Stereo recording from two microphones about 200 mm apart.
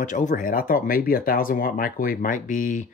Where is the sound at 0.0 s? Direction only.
40° left (ahead or behind).